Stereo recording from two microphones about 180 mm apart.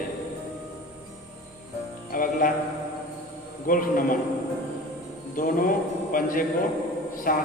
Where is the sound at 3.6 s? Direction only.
50° left (ahead or behind).